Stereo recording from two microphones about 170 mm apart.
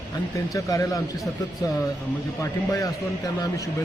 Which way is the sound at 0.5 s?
20° left (ahead or behind).